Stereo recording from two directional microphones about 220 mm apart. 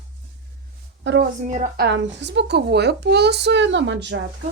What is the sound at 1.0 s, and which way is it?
Speech, 55° right (ahead or behind).